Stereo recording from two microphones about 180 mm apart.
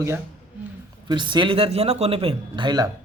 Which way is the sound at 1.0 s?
25° right (ahead or behind).